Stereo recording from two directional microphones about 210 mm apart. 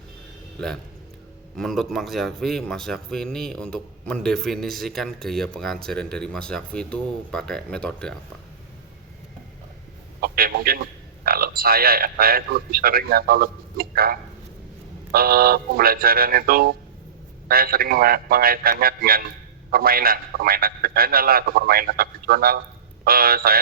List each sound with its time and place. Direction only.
1.5 s a man's voice: centre (ahead or behind)
10.2 s a sound: 45° right (ahead or behind)
11.3 s a man's voice: 45° right (ahead or behind)